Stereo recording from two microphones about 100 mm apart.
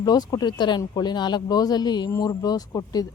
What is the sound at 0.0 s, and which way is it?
Speech, 40° left (ahead or behind).